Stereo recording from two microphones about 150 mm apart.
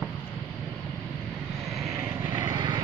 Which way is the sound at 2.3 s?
30° right (ahead or behind).